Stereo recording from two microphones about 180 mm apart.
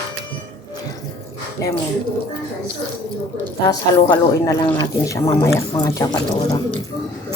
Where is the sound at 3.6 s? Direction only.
20° left (ahead or behind).